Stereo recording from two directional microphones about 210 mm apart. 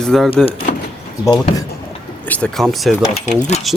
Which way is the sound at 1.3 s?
20° left (ahead or behind).